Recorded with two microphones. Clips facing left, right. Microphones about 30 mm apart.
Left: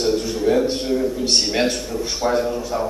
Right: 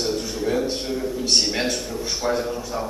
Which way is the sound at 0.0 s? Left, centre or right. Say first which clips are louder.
Left 5 dB; centre.